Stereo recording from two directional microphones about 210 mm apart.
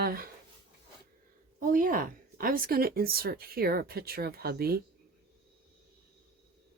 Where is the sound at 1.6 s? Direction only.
40° right (ahead or behind).